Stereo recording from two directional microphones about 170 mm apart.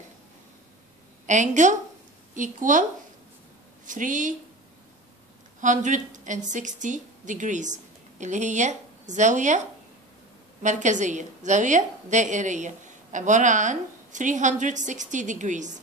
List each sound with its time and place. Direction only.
1.2 s a woman's voice: 45° right (ahead or behind)
3.8 s a woman's voice: 50° right (ahead or behind)
5.6 s a woman's voice: 50° right (ahead or behind)
10.6 s a woman's voice: 45° right (ahead or behind)